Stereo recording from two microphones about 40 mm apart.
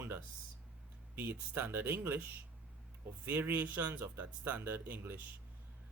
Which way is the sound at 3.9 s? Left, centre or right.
Right.